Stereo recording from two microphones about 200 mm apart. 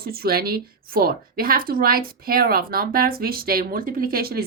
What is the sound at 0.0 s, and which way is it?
A woman's voice, 50° right (ahead or behind).